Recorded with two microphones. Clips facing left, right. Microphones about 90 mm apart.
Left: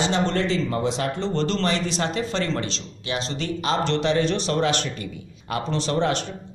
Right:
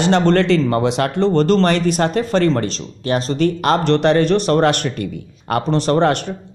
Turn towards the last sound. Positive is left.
turn(degrees=-60)  # may be behind; listen again after turning